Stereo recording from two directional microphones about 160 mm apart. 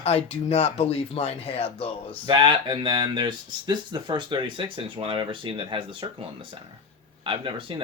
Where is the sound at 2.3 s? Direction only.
30° right (ahead or behind).